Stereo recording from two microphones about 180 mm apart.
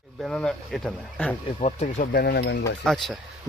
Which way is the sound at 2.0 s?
55° left (ahead or behind).